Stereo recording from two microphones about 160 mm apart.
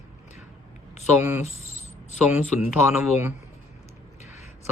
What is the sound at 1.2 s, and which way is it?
Speech, 20° right (ahead or behind).